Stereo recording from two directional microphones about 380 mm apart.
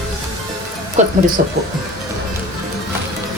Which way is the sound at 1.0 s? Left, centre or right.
Centre.